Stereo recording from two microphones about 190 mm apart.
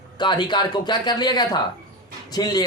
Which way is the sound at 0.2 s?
25° left (ahead or behind).